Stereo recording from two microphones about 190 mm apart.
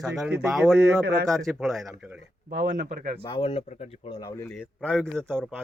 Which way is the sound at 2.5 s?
45° right (ahead or behind).